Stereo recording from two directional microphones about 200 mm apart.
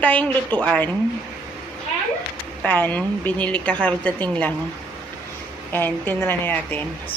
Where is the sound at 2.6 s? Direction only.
10° left (ahead or behind).